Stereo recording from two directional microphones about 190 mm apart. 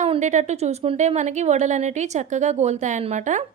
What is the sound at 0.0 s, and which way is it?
A woman's voice, 35° right (ahead or behind).